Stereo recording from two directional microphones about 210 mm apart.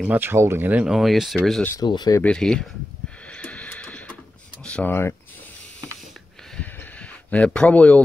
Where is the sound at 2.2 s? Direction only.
5° left (ahead or behind).